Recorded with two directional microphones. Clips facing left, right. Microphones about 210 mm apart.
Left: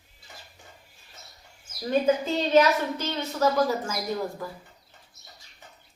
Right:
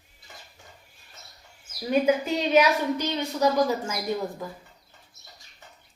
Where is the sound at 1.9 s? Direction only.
10° right (ahead or behind).